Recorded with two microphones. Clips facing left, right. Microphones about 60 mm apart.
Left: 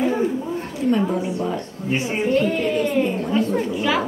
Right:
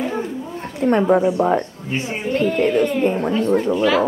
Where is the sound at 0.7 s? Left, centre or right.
Right.